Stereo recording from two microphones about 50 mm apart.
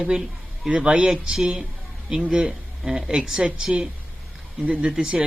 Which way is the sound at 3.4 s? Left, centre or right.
Right.